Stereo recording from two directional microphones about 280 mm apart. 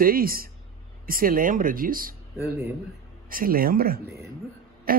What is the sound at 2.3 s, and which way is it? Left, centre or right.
Speech, centre.